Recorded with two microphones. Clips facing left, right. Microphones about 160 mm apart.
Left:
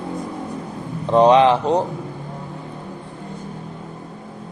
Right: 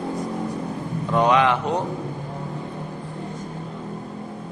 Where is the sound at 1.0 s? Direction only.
30° left (ahead or behind).